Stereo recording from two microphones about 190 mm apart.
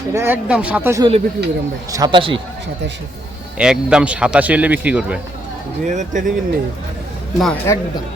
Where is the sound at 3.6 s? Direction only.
5° right (ahead or behind).